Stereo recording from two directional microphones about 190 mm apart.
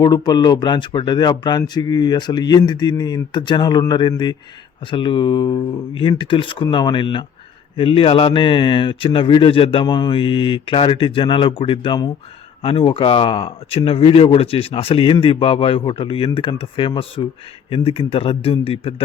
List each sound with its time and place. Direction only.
0.0 s speech: 20° left (ahead or behind)